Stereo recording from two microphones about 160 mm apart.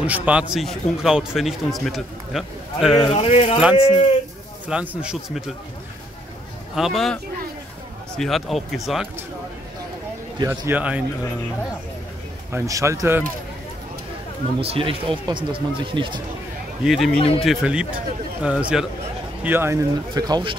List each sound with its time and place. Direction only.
0.0 s speech: 10° right (ahead or behind)
3.0 s speech: 35° left (ahead or behind)
4.6 s speech: 5° right (ahead or behind)
6.7 s speech: centre (ahead or behind)
8.2 s speech: centre (ahead or behind)
10.4 s speech: 20° right (ahead or behind)
10.7 s speech: 10° right (ahead or behind)
12.4 s speech: 20° right (ahead or behind)
14.6 s speech: 35° right (ahead or behind)
16.8 s speech: centre (ahead or behind); by 20.5 s 25° right (ahead or behind)